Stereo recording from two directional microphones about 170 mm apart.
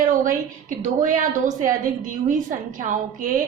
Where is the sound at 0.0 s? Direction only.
50° right (ahead or behind).